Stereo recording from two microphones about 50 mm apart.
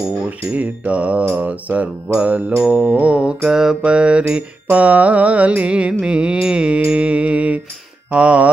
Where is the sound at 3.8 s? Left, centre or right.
Right.